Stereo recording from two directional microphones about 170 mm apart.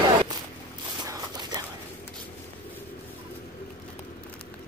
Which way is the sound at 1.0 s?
20° right (ahead or behind).